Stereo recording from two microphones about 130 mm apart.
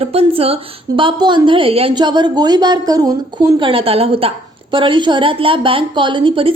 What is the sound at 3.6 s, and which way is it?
A woman's voice, 45° right (ahead or behind).